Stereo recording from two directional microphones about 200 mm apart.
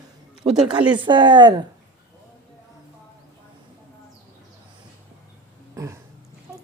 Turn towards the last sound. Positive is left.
turn(degrees=-15)  # may be behind; listen again after turning